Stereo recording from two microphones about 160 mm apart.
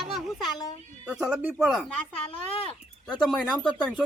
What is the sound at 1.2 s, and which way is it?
Speech, 10° right (ahead or behind).